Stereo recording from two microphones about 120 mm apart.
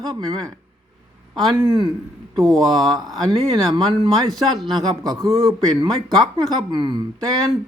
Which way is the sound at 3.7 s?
45° right (ahead or behind).